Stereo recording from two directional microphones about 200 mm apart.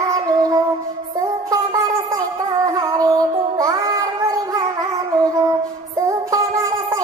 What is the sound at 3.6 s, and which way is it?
Music, 20° right (ahead or behind).